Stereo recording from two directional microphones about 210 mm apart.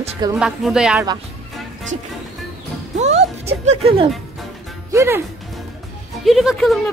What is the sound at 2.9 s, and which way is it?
Speech, 30° right (ahead or behind).